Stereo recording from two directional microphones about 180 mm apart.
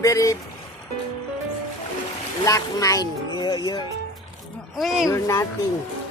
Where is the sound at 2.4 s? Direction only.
20° left (ahead or behind).